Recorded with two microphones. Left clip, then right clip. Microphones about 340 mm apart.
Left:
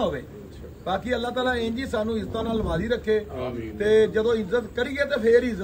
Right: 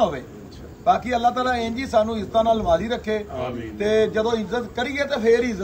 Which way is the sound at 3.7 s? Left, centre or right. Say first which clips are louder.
Even; centre.